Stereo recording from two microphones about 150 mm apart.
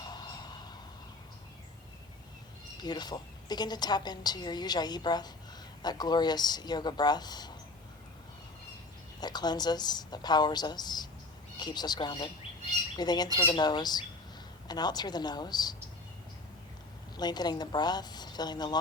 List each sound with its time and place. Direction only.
0.0 s a sound: 30° left (ahead or behind)
2.8 s a woman's voice: 30° left (ahead or behind)
9.2 s a woman's voice: 25° left (ahead or behind)
17.2 s a woman's voice: 30° left (ahead or behind)